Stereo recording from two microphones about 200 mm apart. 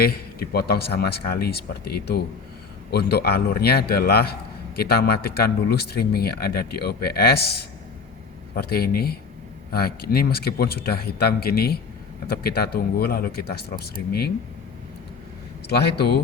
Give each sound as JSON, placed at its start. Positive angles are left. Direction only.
{"t": 0.0, "sound": "speech", "side_deg": 50}
{"t": 16.0, "sound": "speech", "side_deg": 55}